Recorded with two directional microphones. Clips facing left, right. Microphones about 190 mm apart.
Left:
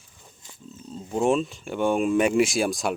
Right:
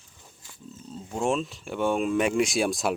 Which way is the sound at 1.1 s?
Centre (ahead or behind).